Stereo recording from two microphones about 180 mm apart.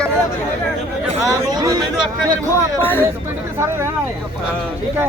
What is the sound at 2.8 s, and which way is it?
Speech, 10° left (ahead or behind).